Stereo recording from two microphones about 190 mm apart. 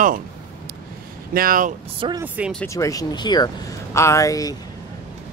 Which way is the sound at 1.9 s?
25° right (ahead or behind).